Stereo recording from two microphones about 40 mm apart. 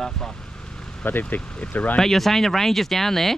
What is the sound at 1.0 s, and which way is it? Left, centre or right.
Speech, left.